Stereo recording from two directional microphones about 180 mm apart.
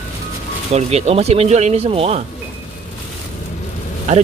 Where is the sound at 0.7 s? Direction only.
35° right (ahead or behind).